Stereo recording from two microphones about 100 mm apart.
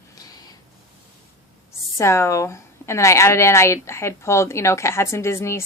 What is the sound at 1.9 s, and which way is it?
A woman's voice, 25° left (ahead or behind).